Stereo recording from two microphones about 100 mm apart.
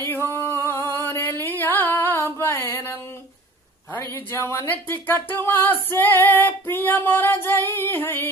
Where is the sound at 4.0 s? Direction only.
25° left (ahead or behind).